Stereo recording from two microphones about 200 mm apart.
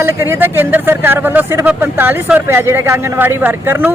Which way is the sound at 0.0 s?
10° right (ahead or behind).